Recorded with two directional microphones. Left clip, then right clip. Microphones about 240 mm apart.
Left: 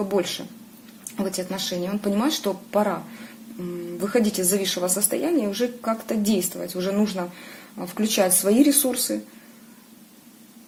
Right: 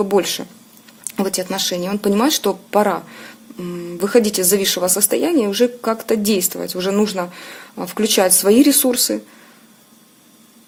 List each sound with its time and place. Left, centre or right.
0.1 s a woman's voice: right
4.0 s a woman's voice: right